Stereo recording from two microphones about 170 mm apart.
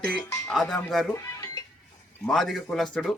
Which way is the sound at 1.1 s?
15° left (ahead or behind).